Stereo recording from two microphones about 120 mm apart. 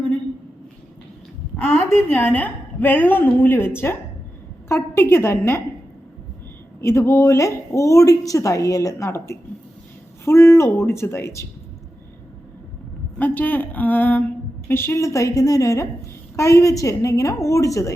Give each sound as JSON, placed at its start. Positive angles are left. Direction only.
{"t": 1.5, "sound": "a woman's voice", "side_deg": 20}
{"t": 6.8, "sound": "a woman's voice", "side_deg": 25}
{"t": 13.1, "sound": "a woman's voice", "side_deg": 15}